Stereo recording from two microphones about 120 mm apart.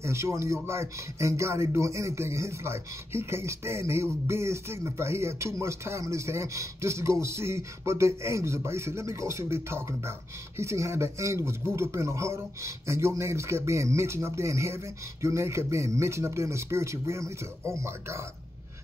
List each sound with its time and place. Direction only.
0.0 s speech: 25° right (ahead or behind)